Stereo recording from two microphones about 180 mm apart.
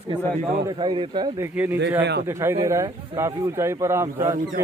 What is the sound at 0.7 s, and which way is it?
Speech, 25° right (ahead or behind).